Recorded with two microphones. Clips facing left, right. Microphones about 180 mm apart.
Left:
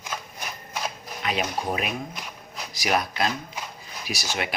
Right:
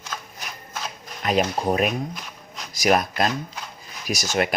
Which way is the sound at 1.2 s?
45° right (ahead or behind).